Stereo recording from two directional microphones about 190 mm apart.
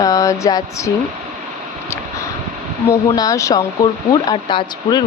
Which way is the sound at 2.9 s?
20° left (ahead or behind).